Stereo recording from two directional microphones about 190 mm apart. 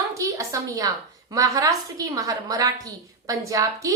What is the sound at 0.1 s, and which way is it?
A woman's voice, 15° right (ahead or behind).